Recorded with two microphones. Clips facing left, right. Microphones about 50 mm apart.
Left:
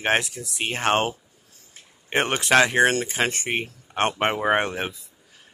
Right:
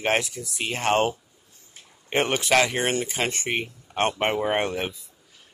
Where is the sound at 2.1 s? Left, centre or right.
Left.